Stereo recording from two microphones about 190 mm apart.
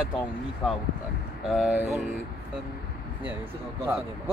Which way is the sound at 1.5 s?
5° right (ahead or behind).